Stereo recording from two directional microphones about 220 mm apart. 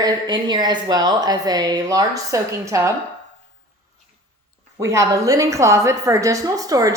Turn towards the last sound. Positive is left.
turn(degrees=-15)  # may be behind; listen again after turning